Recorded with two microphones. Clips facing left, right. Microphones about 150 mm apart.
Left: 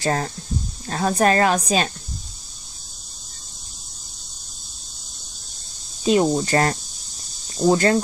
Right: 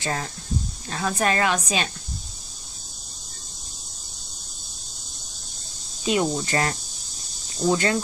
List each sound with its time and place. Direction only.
0.0 s speech: 40° left (ahead or behind)
6.0 s speech: 40° left (ahead or behind)